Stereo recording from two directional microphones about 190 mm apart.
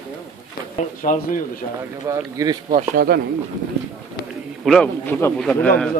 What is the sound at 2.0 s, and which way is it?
Speech, 20° right (ahead or behind).